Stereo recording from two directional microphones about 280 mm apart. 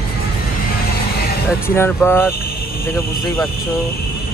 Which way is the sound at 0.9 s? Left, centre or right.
Left.